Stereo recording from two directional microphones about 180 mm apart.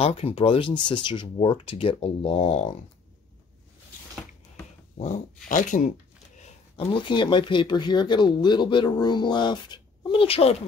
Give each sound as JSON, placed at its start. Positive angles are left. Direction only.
{"t": 0.0, "sound": "speech", "side_deg": 30}
{"t": 4.9, "sound": "speech", "side_deg": 45}